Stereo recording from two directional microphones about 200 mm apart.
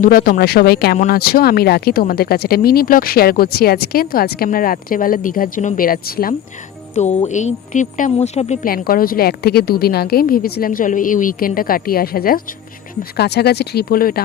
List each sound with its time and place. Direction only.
0.0 s speech: 45° left (ahead or behind)
6.9 s speech: 35° left (ahead or behind)
8.7 s speech: 45° left (ahead or behind)